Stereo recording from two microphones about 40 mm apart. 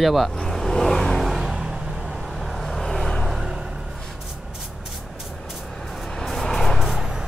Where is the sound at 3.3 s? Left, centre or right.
Centre.